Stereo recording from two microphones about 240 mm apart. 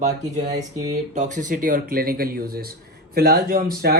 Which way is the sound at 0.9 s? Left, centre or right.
Right.